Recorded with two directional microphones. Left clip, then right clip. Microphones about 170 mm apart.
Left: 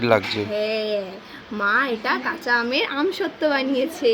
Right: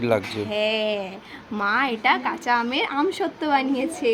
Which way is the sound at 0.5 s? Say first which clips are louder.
Right 2 dB; 40° right (ahead or behind).